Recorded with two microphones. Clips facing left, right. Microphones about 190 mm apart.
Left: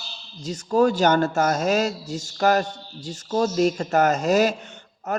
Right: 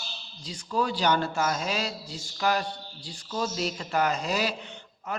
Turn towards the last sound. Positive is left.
turn(degrees=45)  # may be behind; listen again after turning